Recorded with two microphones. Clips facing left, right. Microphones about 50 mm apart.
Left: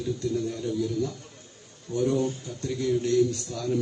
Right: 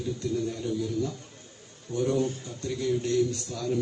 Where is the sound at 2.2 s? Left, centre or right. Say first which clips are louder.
Left 1 dB; left.